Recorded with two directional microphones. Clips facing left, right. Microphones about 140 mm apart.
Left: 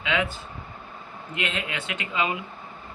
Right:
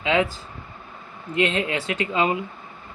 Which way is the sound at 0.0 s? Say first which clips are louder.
Right 5 dB; 30° right (ahead or behind).